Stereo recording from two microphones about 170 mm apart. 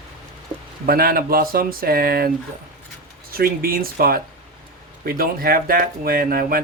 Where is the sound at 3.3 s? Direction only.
60° right (ahead or behind).